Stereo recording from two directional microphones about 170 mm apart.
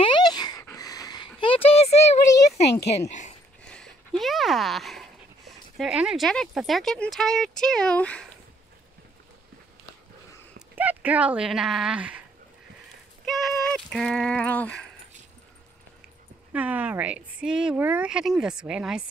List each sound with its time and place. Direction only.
0.0 s a sound: 25° left (ahead or behind)
3.1 s speech: 45° left (ahead or behind)
3.6 s a sound: 5° left (ahead or behind)
5.5 s speech: centre (ahead or behind)
10.8 s speech: 10° right (ahead or behind)
13.2 s speech: centre (ahead or behind)
16.5 s speech: 10° right (ahead or behind)